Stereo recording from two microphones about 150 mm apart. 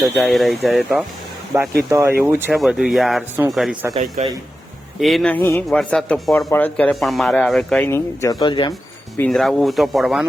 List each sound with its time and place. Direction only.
0.0 s speech: centre (ahead or behind)
1.5 s speech: 15° right (ahead or behind)
2.5 s speech: 5° right (ahead or behind)
4.2 s speech: 55° right (ahead or behind)
4.9 s speech: centre (ahead or behind)
7.8 s speech: 15° left (ahead or behind)
9.3 s speech: centre (ahead or behind)